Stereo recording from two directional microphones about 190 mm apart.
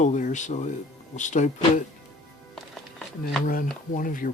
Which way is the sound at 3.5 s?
45° left (ahead or behind).